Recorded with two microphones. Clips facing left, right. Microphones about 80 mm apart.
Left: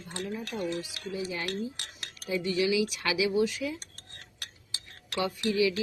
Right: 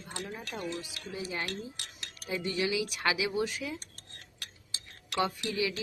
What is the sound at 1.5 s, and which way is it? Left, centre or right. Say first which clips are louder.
Cutlery: left 5 dB; left.